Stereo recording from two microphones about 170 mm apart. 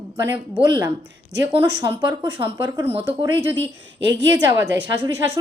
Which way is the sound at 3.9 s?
90° right.